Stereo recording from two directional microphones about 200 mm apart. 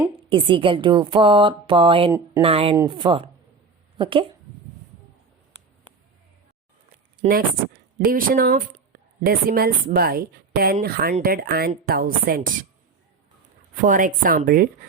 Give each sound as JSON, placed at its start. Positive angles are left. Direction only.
{"t": 0.0, "sound": "a woman's voice", "side_deg": -25}
{"t": 7.3, "sound": "a woman's voice", "side_deg": -45}
{"t": 13.8, "sound": "a woman's voice", "side_deg": -40}